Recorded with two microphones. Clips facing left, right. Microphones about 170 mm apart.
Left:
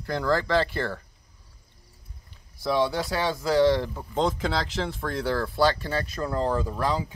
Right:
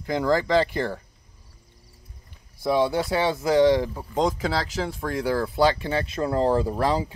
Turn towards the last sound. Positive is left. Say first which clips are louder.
# right 4 dB
turn(degrees=-30)  # may be behind; listen again after turning